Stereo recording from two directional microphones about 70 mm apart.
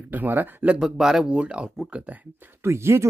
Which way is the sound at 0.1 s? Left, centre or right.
Right.